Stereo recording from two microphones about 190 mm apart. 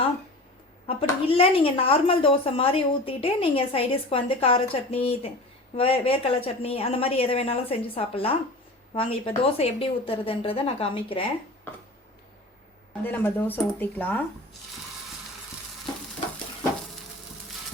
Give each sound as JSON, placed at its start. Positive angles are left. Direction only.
{"t": 0.9, "sound": "speech", "side_deg": 30}
{"t": 13.1, "sound": "speech", "side_deg": 10}